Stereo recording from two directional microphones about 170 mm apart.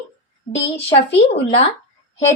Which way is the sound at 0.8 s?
35° left (ahead or behind).